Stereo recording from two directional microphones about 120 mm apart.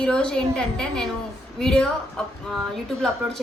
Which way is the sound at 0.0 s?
10° left (ahead or behind).